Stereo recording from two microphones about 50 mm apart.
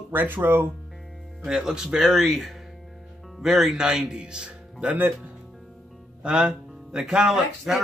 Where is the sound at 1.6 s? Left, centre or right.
Centre.